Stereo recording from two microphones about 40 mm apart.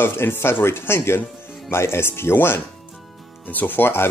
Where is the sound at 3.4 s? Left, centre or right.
Left.